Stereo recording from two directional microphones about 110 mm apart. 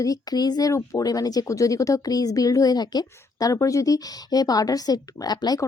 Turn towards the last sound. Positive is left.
turn(degrees=35)  # may be behind; listen again after turning